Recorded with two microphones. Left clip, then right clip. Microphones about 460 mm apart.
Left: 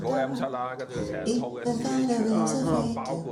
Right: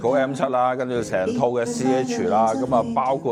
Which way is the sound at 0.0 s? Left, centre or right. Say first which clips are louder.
Right 7 dB; right.